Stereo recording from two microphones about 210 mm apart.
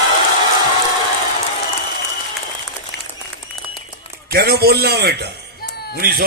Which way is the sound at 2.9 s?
55° left (ahead or behind).